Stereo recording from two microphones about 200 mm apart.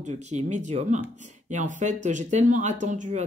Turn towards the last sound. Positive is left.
turn(degrees=-40)  # may be behind; listen again after turning